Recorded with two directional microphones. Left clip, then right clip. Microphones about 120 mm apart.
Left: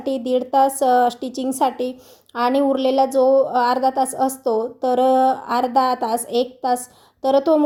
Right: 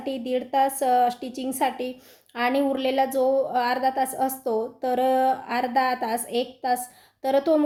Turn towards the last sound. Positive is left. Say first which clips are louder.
# left 5 dB
turn(degrees=20)  # may be behind; listen again after turning